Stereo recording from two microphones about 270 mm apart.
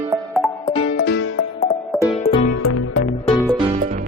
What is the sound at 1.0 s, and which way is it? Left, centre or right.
Music, left.